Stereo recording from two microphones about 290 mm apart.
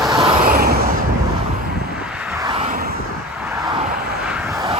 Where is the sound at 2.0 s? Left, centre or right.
Centre.